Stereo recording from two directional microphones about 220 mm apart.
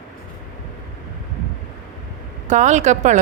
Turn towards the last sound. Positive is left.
turn(degrees=-35)  # may be behind; listen again after turning